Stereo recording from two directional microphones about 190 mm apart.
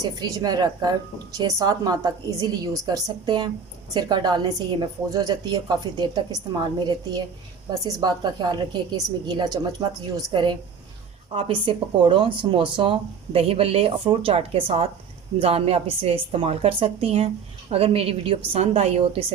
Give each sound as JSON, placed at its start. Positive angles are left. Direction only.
{"t": 0.2, "sound": "a woman's voice", "side_deg": -20}